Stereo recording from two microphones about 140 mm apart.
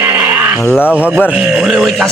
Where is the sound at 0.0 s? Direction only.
10° right (ahead or behind).